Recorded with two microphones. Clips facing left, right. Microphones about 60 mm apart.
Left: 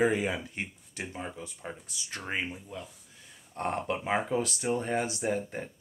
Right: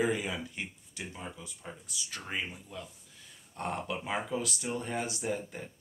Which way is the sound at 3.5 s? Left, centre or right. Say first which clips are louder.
Left 4 dB; left.